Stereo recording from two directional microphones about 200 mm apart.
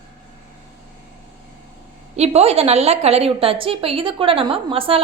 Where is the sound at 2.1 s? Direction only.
30° right (ahead or behind).